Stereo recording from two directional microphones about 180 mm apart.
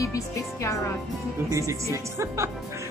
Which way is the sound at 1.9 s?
15° right (ahead or behind).